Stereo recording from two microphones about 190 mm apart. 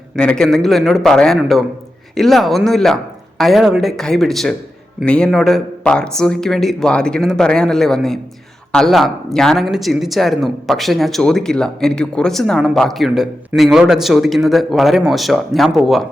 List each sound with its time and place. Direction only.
0.2 s a man's voice: 5° left (ahead or behind)